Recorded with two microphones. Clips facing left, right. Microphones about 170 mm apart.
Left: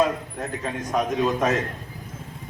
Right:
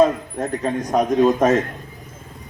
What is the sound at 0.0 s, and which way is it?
A man's voice, 40° right (ahead or behind).